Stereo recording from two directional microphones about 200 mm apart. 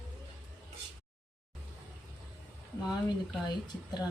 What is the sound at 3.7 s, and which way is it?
Speech, 20° left (ahead or behind).